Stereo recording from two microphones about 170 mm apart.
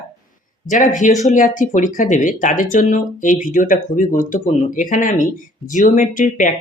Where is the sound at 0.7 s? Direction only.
45° left (ahead or behind).